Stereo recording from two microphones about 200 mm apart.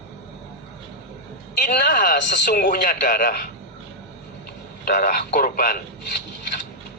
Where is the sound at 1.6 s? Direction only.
45° left (ahead or behind).